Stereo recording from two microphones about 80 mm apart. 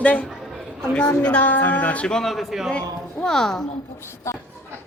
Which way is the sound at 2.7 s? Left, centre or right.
Centre.